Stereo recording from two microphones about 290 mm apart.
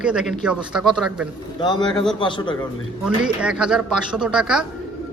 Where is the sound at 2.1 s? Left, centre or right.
Centre.